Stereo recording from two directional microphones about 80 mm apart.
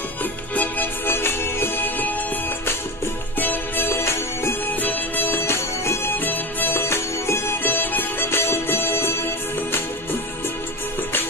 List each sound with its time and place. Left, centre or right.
0.6 s music: left
3.3 s music: left
4.7 s music: left